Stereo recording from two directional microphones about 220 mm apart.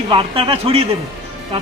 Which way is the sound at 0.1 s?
25° right (ahead or behind).